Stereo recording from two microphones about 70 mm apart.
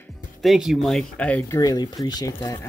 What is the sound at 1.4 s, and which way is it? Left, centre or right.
Speech, left.